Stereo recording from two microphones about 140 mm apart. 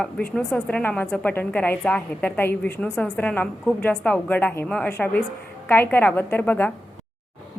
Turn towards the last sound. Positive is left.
turn(degrees=10)  # may be behind; listen again after turning